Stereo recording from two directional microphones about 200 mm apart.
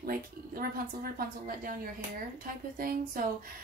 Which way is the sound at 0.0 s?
50° right (ahead or behind).